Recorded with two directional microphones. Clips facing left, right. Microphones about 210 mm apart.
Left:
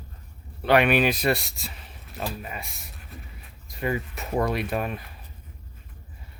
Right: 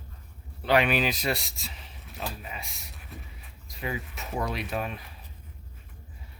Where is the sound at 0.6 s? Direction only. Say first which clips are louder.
Left 4 dB; 60° left (ahead or behind).